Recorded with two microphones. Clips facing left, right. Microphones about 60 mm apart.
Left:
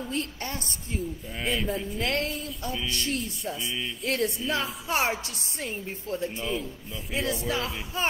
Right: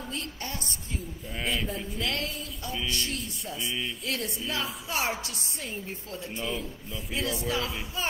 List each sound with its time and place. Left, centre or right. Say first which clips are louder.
0.1 s a woman's voice: left 4 dB; left
1.3 s a man's voice: left 1 dB; centre
2.0 s a woman's voice: left 2 dB; left
6.4 s a man's voice: left 2 dB; centre
7.4 s a woman's voice: left 1 dB; left